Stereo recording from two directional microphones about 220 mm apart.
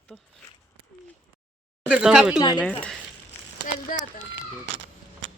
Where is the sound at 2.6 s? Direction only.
5° left (ahead or behind).